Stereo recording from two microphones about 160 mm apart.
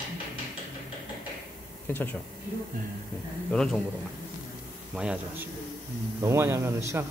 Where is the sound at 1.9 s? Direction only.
10° left (ahead or behind).